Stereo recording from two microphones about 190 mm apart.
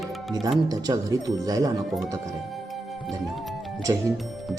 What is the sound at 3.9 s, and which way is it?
Speech, 20° right (ahead or behind).